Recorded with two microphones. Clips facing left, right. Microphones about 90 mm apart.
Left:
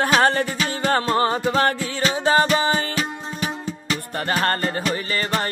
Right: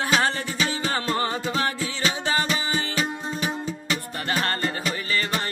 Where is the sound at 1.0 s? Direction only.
35° left (ahead or behind).